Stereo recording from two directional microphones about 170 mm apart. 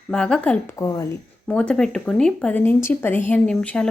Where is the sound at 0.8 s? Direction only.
20° left (ahead or behind).